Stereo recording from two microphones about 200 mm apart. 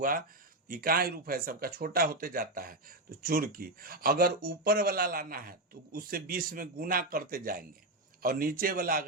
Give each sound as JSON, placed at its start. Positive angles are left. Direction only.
{"t": 0.0, "sound": "speech", "side_deg": -45}